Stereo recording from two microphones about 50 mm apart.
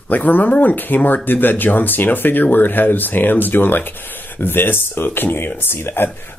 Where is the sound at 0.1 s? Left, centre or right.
Left.